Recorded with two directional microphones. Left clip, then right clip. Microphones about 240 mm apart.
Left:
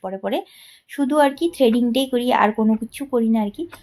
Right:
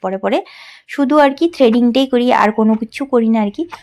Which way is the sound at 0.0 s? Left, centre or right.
Right.